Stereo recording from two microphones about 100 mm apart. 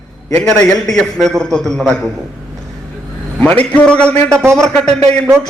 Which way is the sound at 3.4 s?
15° left (ahead or behind).